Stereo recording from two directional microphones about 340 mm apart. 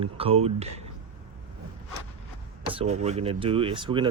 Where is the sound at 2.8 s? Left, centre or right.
Centre.